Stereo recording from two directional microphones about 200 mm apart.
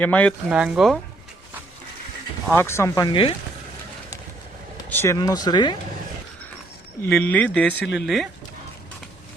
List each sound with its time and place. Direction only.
0.0 s speech: 5° left (ahead or behind)
0.5 s speech: 5° right (ahead or behind)
2.5 s speech: 10° left (ahead or behind)
4.9 s speech: 10° left (ahead or behind)
7.0 s speech: 5° left (ahead or behind)